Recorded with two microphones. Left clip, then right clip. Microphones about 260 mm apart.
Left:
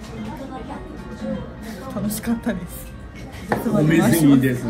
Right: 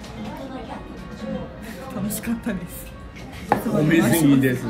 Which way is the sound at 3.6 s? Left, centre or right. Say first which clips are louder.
Left 3 dB; centre.